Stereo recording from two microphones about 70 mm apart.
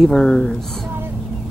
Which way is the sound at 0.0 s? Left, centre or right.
Centre.